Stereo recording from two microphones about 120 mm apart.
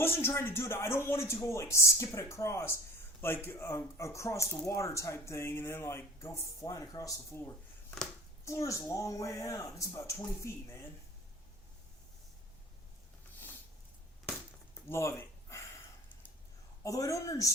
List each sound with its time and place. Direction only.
0.0 s speech: 20° left (ahead or behind)
14.8 s a sound: 20° left (ahead or behind)
16.8 s speech: 25° left (ahead or behind)